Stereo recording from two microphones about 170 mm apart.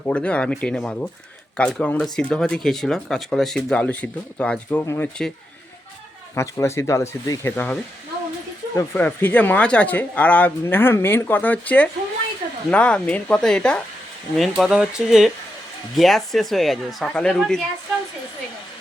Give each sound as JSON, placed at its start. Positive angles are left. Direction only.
{"t": 0.0, "sound": "speech", "side_deg": 5}
{"t": 6.3, "sound": "speech", "side_deg": 15}